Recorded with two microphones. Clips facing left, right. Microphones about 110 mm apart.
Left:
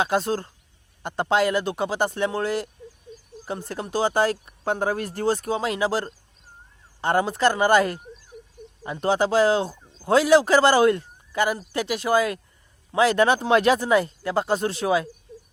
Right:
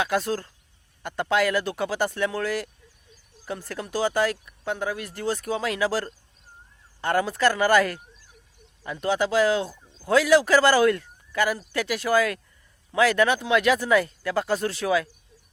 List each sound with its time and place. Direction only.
0.0 s speech: 25° left (ahead or behind)